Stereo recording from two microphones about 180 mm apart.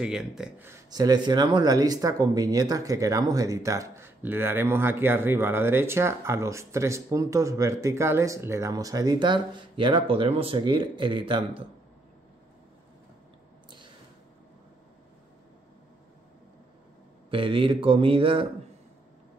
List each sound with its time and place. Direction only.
0.0 s speech: 5° right (ahead or behind)
0.8 s speech: 20° right (ahead or behind)
17.3 s speech: 30° right (ahead or behind)